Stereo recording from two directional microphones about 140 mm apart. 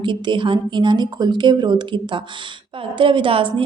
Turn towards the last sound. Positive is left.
turn(degrees=-40)  # may be behind; listen again after turning